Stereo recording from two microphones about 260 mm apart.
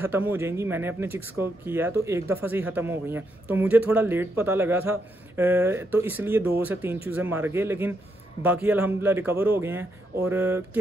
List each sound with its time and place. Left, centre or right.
0.0 s speech: centre